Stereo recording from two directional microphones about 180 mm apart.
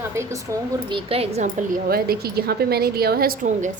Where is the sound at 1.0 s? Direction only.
30° right (ahead or behind); by 3.7 s 50° right (ahead or behind).